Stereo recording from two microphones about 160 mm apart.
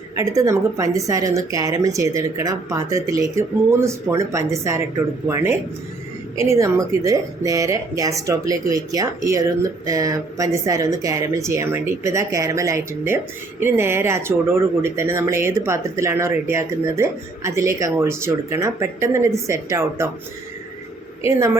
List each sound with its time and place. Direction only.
0.2 s speech: 20° right (ahead or behind)
21.2 s speech: 15° right (ahead or behind)